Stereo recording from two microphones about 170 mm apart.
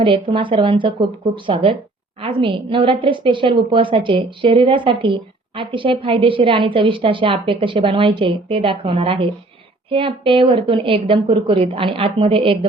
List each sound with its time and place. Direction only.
0.0 s a woman's voice: 30° right (ahead or behind)